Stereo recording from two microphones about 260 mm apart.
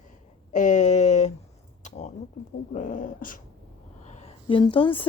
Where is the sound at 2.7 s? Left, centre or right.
Left.